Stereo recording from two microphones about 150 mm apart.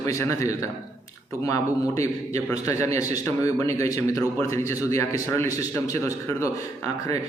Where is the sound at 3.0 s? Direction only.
20° left (ahead or behind).